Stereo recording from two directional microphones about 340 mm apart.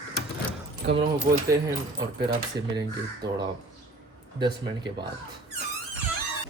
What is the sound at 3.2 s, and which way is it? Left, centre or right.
Speech, centre.